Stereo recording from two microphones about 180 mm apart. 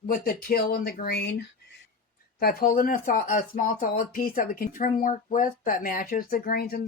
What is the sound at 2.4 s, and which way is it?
Speech, 55° left (ahead or behind).